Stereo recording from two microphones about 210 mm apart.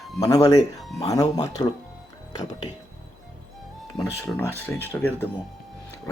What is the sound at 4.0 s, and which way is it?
Speech, 10° left (ahead or behind).